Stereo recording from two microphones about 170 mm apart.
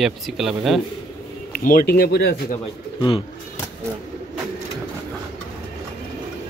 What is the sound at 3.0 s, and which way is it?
Speech, 30° left (ahead or behind).